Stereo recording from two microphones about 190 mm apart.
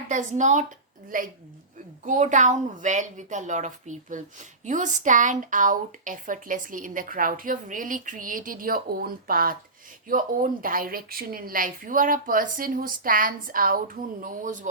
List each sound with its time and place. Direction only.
0.1 s a woman's voice: 40° right (ahead or behind)